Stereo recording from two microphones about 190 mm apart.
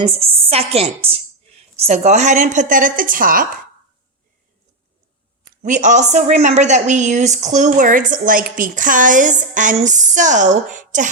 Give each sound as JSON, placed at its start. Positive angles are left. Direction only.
{"t": 0.0, "sound": "a woman's voice", "side_deg": -30}
{"t": 5.6, "sound": "a woman's voice", "side_deg": -40}